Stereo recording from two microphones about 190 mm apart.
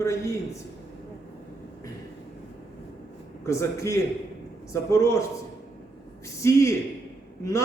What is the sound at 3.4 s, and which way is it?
Speech, 15° left (ahead or behind).